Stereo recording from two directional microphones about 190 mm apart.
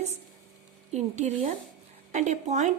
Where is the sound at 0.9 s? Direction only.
35° right (ahead or behind).